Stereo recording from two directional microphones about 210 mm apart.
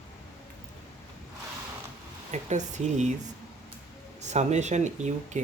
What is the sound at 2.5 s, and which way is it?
Speech, 35° right (ahead or behind).